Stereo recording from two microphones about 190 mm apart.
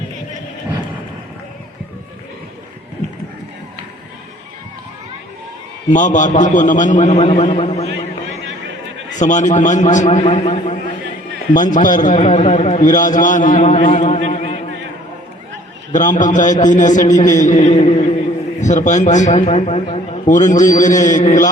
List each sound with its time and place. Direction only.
5.9 s a man's voice: 40° left (ahead or behind)
9.1 s a man's voice: 40° left (ahead or behind)
15.9 s a man's voice: 40° left (ahead or behind)